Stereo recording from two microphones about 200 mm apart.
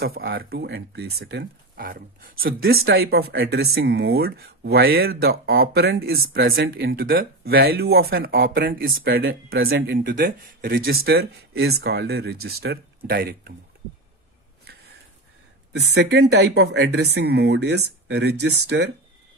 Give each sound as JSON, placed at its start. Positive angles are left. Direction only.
{"t": 0.0, "sound": "speech", "side_deg": -50}
{"t": 15.7, "sound": "speech", "side_deg": -55}